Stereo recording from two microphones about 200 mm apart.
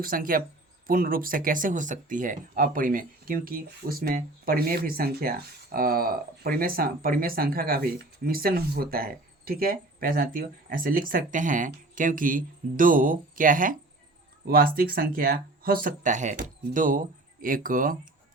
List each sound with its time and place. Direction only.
0.0 s speech: 45° right (ahead or behind)